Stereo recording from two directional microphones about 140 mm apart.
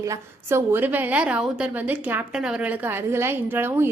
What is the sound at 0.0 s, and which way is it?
A woman's voice, 20° right (ahead or behind).